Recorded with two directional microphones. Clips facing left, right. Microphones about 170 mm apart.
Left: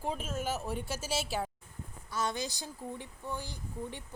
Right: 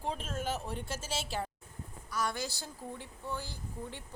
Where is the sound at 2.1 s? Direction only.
20° left (ahead or behind).